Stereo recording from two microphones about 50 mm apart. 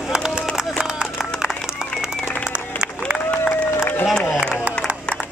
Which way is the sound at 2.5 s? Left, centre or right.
Right.